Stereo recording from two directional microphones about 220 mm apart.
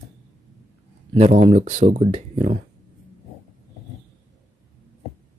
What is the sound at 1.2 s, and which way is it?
Speech, 30° right (ahead or behind).